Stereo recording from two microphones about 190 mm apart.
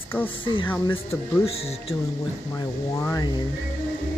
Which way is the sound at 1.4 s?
30° left (ahead or behind).